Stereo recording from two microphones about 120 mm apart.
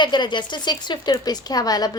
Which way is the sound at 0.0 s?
40° left (ahead or behind).